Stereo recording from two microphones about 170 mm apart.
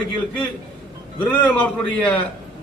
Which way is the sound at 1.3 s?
10° left (ahead or behind).